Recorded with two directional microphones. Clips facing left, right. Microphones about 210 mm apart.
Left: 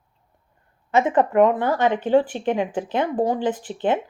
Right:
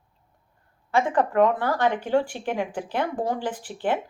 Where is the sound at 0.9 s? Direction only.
20° left (ahead or behind).